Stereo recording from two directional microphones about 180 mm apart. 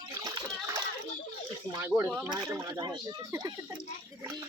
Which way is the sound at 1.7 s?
15° right (ahead or behind).